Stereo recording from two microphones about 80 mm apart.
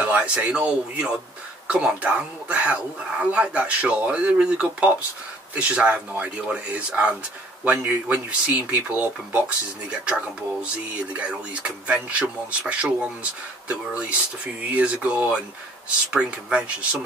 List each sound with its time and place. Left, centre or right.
0.0 s speech: centre
7.8 s a man's voice: right
8.3 s speech: centre